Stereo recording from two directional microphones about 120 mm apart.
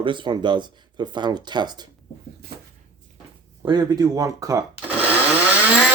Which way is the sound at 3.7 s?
35° right (ahead or behind).